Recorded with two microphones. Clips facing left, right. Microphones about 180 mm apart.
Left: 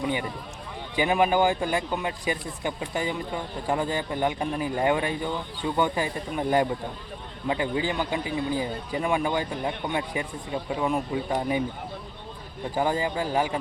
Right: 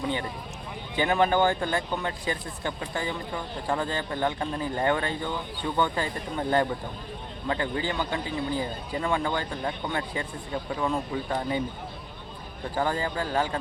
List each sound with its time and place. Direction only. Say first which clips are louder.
0.9 s speech: left 1 dB; 10° left (ahead or behind)
12.7 s speech: left 2 dB; 15° left (ahead or behind)